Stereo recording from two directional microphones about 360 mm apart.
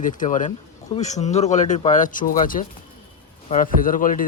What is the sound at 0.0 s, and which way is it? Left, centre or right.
Speech, left.